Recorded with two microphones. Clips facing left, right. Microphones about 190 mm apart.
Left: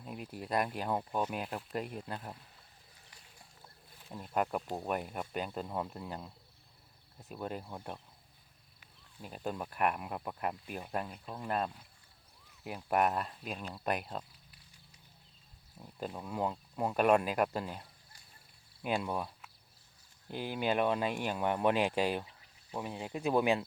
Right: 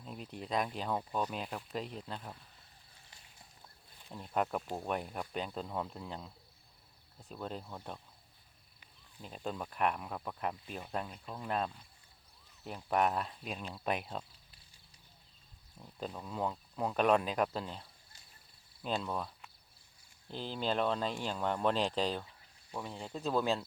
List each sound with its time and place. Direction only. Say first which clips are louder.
0.0 s speech: left 2 dB; 5° left (ahead or behind)
3.9 s speech: left 1 dB; 5° left (ahead or behind)
15.8 s speech: left 1 dB; 5° left (ahead or behind)